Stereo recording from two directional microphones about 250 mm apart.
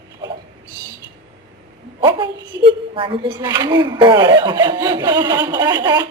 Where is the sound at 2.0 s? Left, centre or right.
Centre.